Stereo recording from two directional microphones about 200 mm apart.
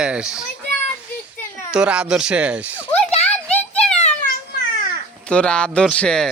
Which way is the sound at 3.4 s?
5° left (ahead or behind).